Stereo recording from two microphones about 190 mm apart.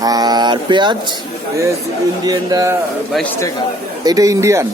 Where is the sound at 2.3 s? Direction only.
20° right (ahead or behind).